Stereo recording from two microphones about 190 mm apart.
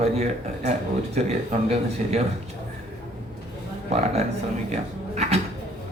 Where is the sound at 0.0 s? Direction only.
35° right (ahead or behind).